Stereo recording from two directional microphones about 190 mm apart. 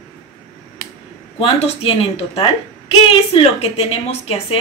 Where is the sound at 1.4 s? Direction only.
30° left (ahead or behind).